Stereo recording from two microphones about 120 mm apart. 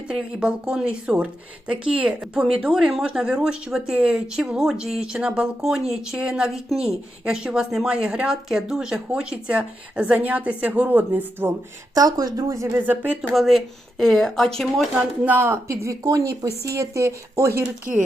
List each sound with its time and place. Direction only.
0.1 s speech: 5° right (ahead or behind)
11.9 s speech: 30° right (ahead or behind)
12.7 s speech: 15° right (ahead or behind)
13.3 s speech: centre (ahead or behind)
15.2 s speech: 15° right (ahead or behind)